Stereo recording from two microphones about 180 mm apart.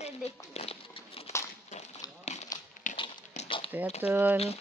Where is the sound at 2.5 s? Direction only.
20° left (ahead or behind).